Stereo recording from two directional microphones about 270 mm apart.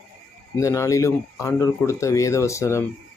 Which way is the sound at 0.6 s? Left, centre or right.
Centre.